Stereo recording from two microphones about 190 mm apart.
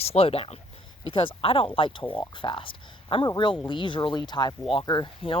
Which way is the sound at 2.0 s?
10° left (ahead or behind).